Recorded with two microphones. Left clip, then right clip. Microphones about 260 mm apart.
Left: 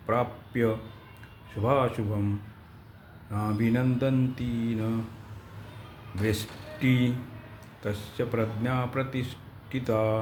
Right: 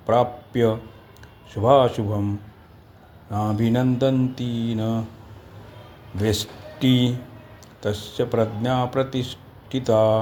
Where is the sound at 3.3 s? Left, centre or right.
Centre.